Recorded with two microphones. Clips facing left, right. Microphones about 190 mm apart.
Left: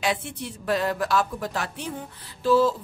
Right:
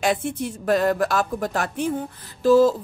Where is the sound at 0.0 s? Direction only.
50° right (ahead or behind).